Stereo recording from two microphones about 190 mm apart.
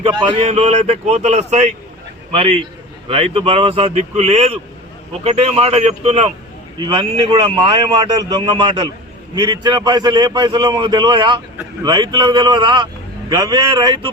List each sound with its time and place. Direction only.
0.0 s a man's voice: 25° right (ahead or behind)